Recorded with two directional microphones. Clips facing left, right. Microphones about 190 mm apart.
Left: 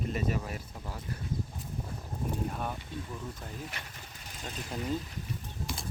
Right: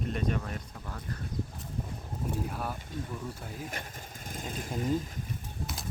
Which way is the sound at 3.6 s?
45° right (ahead or behind).